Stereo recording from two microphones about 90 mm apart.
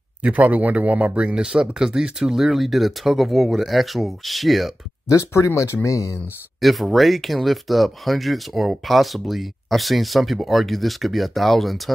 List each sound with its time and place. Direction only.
0.2 s speech: 15° right (ahead or behind); by 4.7 s centre (ahead or behind)
5.0 s speech: 35° left (ahead or behind)
6.6 s speech: centre (ahead or behind)